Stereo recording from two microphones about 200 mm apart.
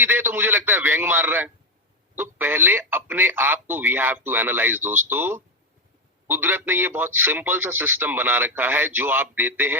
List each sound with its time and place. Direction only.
0.0 s a man's voice: 10° right (ahead or behind)